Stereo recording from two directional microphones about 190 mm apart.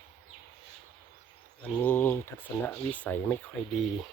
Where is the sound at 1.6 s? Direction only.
10° left (ahead or behind).